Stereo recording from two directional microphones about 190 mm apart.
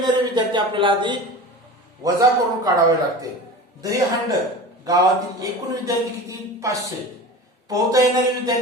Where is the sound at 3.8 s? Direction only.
20° right (ahead or behind).